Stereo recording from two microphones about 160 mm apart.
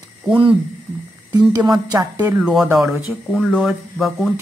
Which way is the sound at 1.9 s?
20° right (ahead or behind).